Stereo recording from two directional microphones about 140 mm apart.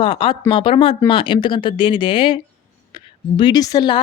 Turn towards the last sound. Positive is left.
turn(degrees=30)  # may be behind; listen again after turning